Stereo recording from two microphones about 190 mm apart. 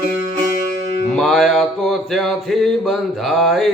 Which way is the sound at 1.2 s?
Centre (ahead or behind).